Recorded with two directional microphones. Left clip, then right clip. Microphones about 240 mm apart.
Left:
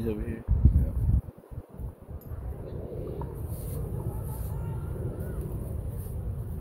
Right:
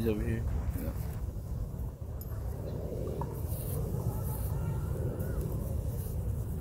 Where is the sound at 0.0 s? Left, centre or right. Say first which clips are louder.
Even; centre.